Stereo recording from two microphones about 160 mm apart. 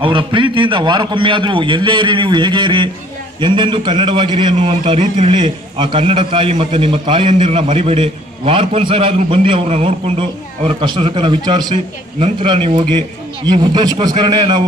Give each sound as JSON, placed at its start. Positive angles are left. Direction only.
{"t": 0.0, "sound": "a man's voice", "side_deg": -30}
{"t": 5.3, "sound": "a man's voice", "side_deg": -30}